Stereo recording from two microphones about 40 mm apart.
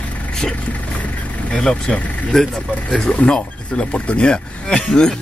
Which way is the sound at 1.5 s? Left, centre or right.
Centre.